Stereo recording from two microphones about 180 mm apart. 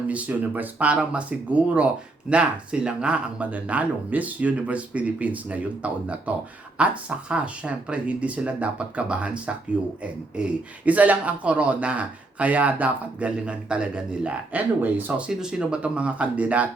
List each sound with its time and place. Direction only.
0.1 s speech: 10° right (ahead or behind)